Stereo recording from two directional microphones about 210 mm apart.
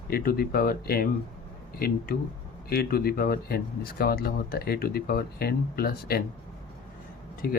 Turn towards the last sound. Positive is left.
turn(degrees=45)  # may be behind; listen again after turning